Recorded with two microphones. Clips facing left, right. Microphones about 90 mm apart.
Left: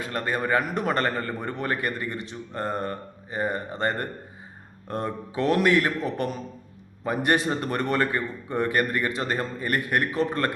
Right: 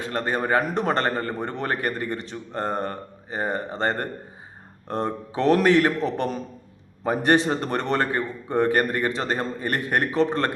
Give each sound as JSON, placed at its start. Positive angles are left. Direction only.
{"t": 0.0, "sound": "a man's voice", "side_deg": -30}